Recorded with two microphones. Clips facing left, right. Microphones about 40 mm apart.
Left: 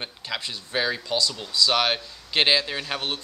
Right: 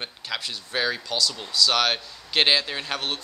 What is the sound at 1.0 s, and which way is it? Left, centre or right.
Speech, centre.